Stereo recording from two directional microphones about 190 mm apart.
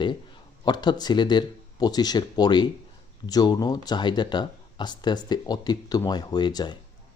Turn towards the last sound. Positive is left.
turn(degrees=20)  # may be behind; listen again after turning